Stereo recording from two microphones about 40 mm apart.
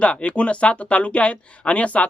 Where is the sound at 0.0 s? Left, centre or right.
Left.